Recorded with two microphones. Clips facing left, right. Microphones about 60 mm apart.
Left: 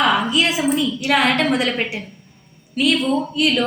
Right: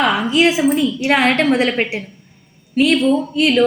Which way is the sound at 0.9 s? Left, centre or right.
Right.